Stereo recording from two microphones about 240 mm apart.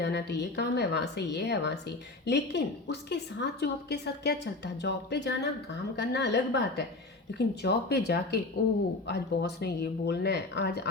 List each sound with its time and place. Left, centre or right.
0.0 s a woman's voice: left